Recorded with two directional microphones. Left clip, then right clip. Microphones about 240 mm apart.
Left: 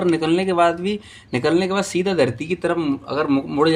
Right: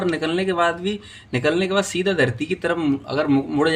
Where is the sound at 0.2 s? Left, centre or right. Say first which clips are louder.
Left 3 dB; left.